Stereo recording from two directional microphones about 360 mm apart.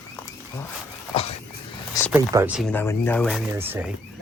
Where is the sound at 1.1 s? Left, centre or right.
Centre.